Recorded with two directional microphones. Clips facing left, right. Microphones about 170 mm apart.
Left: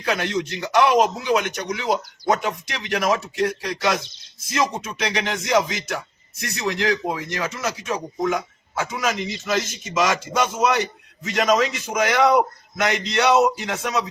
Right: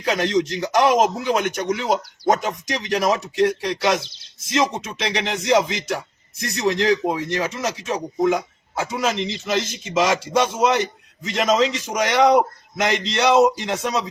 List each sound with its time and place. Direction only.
0.2 s a man's voice: 40° right (ahead or behind)
3.1 s a man's voice: 25° right (ahead or behind)